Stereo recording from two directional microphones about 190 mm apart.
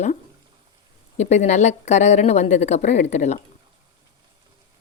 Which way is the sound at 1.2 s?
35° left (ahead or behind).